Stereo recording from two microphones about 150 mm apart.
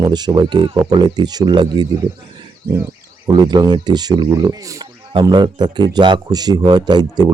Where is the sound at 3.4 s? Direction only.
30° right (ahead or behind).